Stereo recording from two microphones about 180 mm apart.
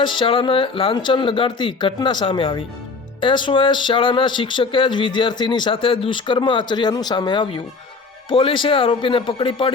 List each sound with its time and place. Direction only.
0.0 s speech: 30° left (ahead or behind)